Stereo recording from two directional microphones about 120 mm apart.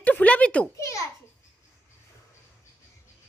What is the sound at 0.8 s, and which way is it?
Speech, 25° left (ahead or behind).